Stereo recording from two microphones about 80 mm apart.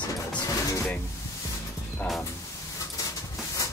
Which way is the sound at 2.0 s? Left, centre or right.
Centre.